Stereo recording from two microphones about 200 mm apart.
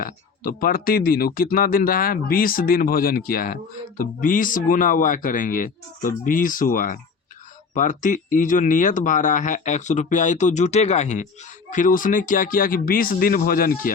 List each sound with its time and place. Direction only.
0.0 s speech: 45° left (ahead or behind)